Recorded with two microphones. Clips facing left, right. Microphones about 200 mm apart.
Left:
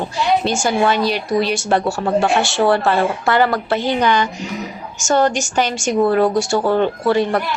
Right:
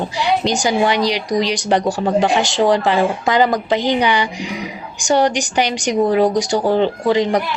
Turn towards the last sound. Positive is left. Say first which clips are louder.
# right 1 dB
turn(degrees=-15)  # may be behind; listen again after turning